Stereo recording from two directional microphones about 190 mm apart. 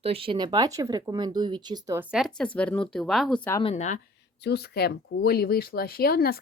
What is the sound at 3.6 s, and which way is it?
Speech, 40° left (ahead or behind).